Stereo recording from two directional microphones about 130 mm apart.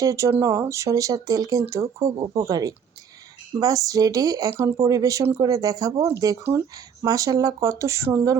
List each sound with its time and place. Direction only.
0.0 s speech: 25° right (ahead or behind)